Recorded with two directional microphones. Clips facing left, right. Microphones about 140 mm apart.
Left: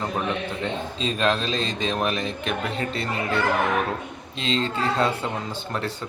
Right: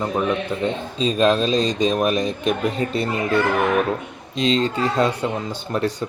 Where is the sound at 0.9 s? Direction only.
20° right (ahead or behind).